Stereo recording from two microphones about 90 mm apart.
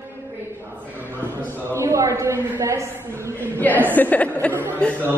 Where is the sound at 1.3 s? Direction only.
25° left (ahead or behind).